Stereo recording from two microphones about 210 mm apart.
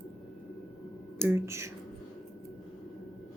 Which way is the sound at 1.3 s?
15° right (ahead or behind).